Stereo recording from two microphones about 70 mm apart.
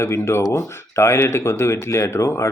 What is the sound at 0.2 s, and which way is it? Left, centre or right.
Speech, left.